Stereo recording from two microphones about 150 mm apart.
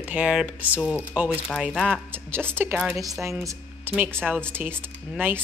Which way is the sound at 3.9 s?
15° right (ahead or behind).